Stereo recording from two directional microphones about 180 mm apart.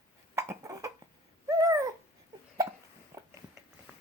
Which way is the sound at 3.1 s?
15° right (ahead or behind).